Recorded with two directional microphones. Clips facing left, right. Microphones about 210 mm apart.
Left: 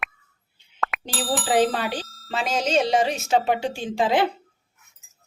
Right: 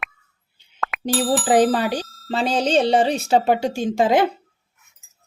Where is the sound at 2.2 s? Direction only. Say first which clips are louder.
Right 4 dB; 30° right (ahead or behind).